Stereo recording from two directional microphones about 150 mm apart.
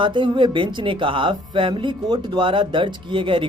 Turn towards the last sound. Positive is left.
turn(degrees=-35)  # may be behind; listen again after turning